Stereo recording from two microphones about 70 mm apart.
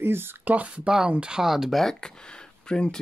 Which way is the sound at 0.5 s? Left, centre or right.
Centre.